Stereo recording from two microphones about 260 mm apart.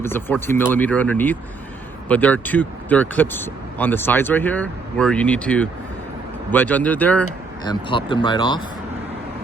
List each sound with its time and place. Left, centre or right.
0.0 s speech: centre
7.6 s speech: centre